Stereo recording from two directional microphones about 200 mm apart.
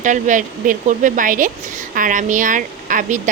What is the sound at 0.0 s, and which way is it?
Speech, 40° right (ahead or behind).